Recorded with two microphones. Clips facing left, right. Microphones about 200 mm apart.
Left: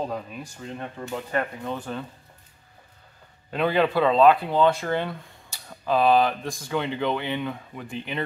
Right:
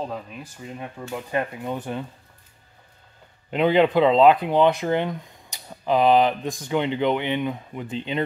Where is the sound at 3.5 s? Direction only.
20° right (ahead or behind).